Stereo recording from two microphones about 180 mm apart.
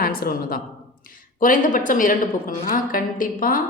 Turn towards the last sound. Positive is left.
turn(degrees=50)  # may be behind; listen again after turning